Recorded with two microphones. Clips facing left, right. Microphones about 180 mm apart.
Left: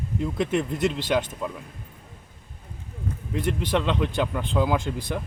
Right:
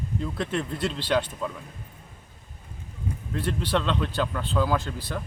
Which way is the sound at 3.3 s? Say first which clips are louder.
Left 2 dB; 15° left (ahead or behind).